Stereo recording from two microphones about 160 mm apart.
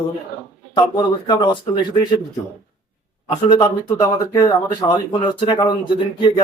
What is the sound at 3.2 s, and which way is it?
Speech, 25° left (ahead or behind).